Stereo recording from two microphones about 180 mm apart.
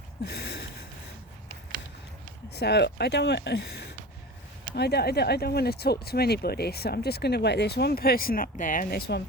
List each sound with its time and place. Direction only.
2.5 s speech: 65° left (ahead or behind)
4.7 s speech: 65° left (ahead or behind)